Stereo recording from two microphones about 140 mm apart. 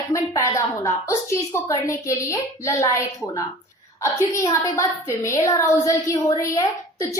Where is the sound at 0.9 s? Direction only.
20° left (ahead or behind).